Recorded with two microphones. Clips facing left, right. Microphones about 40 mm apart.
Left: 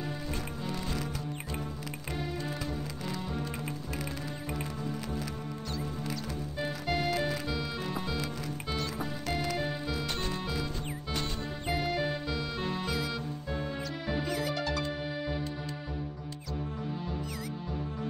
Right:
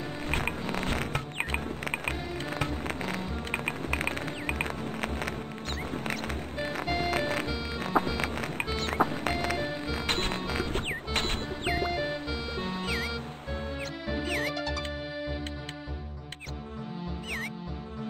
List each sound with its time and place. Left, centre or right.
0.3 s music: right
6.6 s music: right
11.7 s music: centre
14.2 s music: right
14.5 s music: centre